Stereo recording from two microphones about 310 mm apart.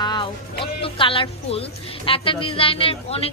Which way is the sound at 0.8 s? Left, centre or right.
Centre.